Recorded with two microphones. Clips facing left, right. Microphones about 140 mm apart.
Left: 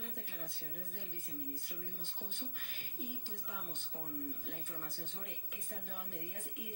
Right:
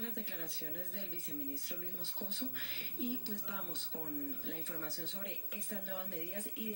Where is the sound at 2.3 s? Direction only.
90° right.